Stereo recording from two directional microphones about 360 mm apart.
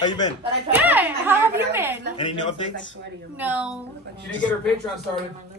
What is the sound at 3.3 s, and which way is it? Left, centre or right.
Speech, centre.